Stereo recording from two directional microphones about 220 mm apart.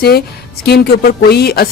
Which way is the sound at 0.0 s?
45° left (ahead or behind).